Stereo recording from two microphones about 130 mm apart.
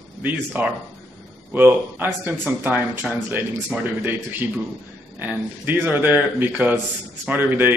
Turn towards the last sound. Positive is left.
turn(degrees=-15)  # may be behind; listen again after turning